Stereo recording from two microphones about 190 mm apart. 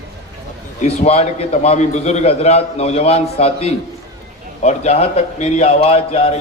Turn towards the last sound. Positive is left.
turn(degrees=30)  # may be behind; listen again after turning